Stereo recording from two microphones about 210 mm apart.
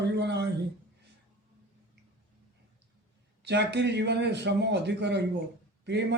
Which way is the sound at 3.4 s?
55° right (ahead or behind).